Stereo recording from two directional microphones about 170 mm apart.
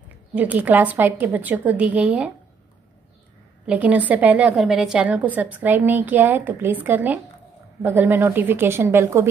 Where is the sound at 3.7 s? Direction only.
10° right (ahead or behind).